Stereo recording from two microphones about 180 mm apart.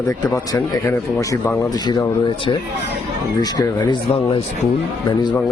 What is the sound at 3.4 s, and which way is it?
Speech, 20° left (ahead or behind).